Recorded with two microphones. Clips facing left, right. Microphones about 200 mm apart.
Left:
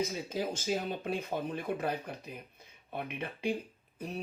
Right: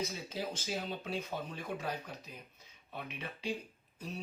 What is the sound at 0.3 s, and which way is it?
Speech, 50° left (ahead or behind).